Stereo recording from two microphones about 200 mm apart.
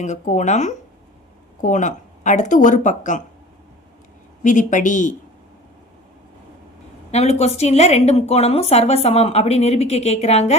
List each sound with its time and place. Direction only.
0.0 s a woman's voice: 35° left (ahead or behind)
4.4 s a woman's voice: 40° left (ahead or behind)
7.1 s a woman's voice: 35° left (ahead or behind)